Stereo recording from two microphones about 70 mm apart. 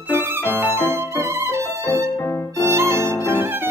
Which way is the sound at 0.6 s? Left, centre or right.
Right.